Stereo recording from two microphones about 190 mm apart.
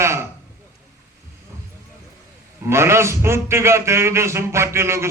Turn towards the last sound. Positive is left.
turn(degrees=-15)  # may be behind; listen again after turning